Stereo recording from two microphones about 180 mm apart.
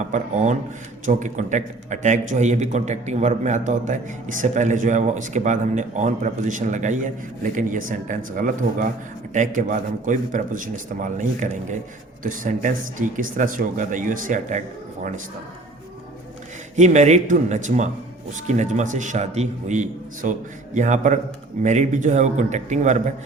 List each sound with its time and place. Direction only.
0.0 s a man's voice: 40° right (ahead or behind)
16.7 s a man's voice: 40° right (ahead or behind)